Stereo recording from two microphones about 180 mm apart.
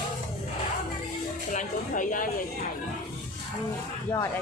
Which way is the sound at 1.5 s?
45° left (ahead or behind).